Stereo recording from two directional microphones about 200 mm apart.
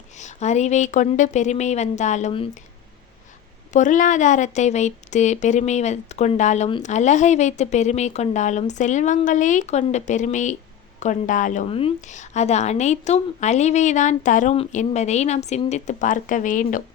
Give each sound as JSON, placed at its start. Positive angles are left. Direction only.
{"t": 0.2, "sound": "a woman's voice", "side_deg": 35}
{"t": 3.7, "sound": "a woman's voice", "side_deg": 40}